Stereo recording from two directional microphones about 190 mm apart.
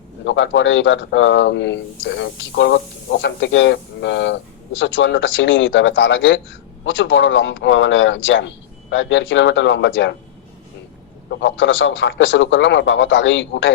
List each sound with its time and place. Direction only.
0.3 s speech: 70° left (ahead or behind)
11.3 s speech: 70° left (ahead or behind)